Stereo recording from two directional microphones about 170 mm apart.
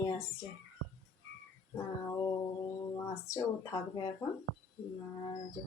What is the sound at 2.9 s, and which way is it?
Speech, 20° left (ahead or behind).